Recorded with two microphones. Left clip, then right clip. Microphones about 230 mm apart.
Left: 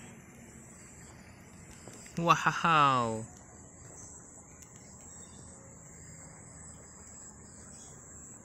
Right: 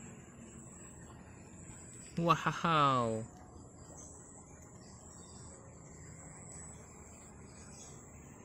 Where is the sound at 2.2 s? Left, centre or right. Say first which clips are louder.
Left 5 dB; centre.